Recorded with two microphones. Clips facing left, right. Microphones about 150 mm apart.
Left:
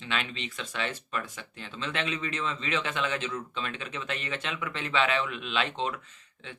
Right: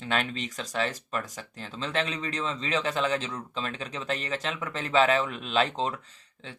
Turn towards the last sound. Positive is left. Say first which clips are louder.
# right 4 dB
turn(degrees=-35)  # may be behind; listen again after turning